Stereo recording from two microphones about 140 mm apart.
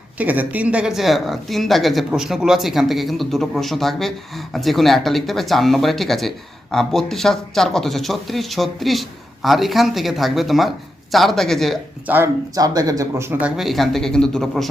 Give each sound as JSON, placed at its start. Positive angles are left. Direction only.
{"t": 0.2, "sound": "speech", "side_deg": -10}
{"t": 12.0, "sound": "speech", "side_deg": -15}
{"t": 12.5, "sound": "speech", "side_deg": -25}
{"t": 13.6, "sound": "speech", "side_deg": 0}